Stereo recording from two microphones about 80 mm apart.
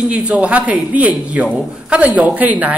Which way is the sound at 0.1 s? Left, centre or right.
Centre.